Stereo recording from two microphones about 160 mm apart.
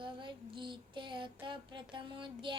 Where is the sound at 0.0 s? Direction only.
30° right (ahead or behind).